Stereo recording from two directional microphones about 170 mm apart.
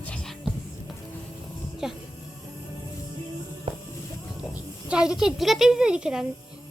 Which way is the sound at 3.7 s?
30° right (ahead or behind).